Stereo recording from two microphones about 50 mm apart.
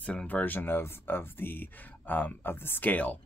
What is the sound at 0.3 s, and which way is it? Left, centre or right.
Speech, left.